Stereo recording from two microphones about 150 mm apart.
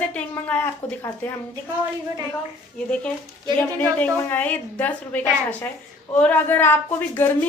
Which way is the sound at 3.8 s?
10° left (ahead or behind).